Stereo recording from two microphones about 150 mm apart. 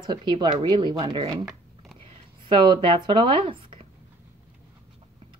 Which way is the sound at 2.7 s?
35° right (ahead or behind).